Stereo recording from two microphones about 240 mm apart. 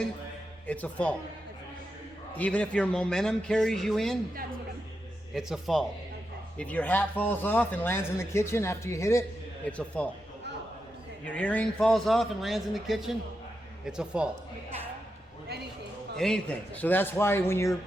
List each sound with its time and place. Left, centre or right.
0.7 s a man's voice: centre
2.4 s a man's voice: centre
5.3 s a man's voice: centre
11.3 s a man's voice: centre
16.1 s speech: centre